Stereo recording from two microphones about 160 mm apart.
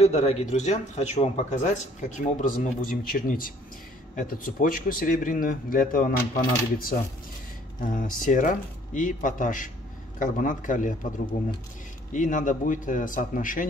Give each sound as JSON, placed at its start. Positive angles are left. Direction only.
{"t": 0.0, "sound": "speech", "side_deg": 45}